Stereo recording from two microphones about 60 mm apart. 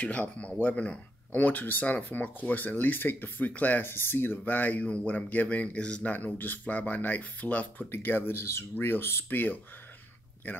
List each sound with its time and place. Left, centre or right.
0.0 s speech: left
3.8 s speech: left; by 6.1 s centre
6.1 s speech: left
7.9 s speech: left